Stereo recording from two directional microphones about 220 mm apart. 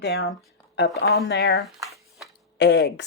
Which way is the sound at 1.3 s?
50° left (ahead or behind).